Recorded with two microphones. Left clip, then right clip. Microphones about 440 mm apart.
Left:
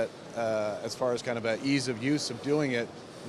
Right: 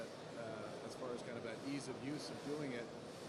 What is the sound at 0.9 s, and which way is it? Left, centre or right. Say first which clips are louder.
Speech: left 16 dB; left.